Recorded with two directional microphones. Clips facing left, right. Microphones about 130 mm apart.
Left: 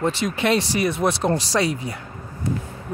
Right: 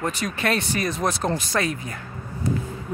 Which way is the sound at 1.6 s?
25° left (ahead or behind).